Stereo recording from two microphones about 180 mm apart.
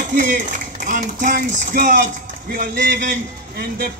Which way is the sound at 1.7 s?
55° right (ahead or behind).